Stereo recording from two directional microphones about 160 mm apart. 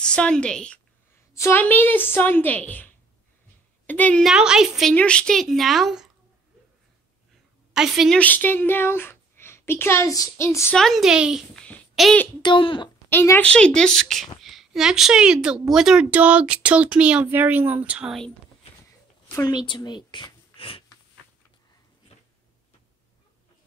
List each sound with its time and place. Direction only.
0.0 s a woman's voice: 5° left (ahead or behind)
7.7 s a woman's voice: 5° right (ahead or behind)
8.2 s a woman's voice: 10° left (ahead or behind)
10.8 s a woman's voice: centre (ahead or behind)
12.4 s speech: 30° left (ahead or behind)
13.1 s a woman's voice: 15° left (ahead or behind); by 18.3 s centre (ahead or behind)
19.3 s speech: 25° left (ahead or behind)